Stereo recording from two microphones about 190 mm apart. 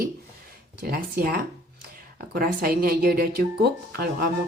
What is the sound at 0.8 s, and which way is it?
Speech, 50° right (ahead or behind).